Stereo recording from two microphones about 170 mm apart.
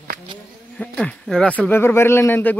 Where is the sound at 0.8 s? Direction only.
5° left (ahead or behind).